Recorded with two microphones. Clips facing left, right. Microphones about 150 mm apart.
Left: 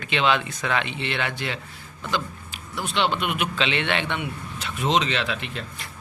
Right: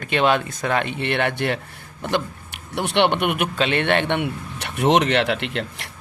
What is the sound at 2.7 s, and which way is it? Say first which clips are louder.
A man's voice: right 6 dB; 70° right (ahead or behind).